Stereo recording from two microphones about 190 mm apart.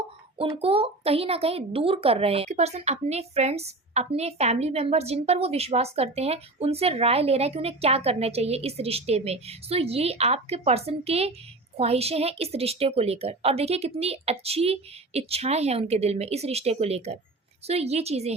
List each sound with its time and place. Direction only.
0.3 s a child's voice: 30° right (ahead or behind)